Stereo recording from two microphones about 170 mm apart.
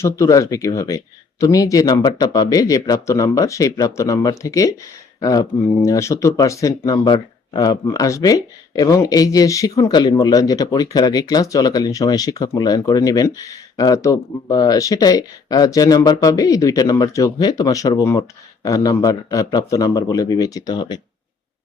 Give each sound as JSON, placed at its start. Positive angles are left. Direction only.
{"t": 0.0, "sound": "speech", "side_deg": 20}